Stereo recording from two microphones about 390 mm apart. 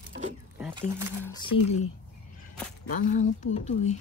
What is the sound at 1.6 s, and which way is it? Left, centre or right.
Speech, left.